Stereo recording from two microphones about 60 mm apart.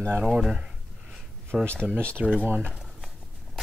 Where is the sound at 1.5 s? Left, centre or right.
Centre.